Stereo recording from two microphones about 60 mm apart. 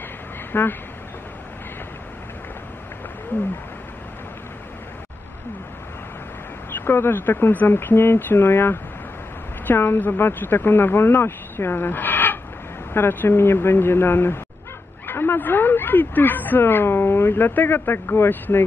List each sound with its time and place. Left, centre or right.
0.5 s speech: left
6.7 s speech: left